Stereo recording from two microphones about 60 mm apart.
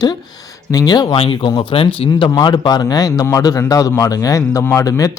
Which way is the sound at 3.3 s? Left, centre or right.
Left.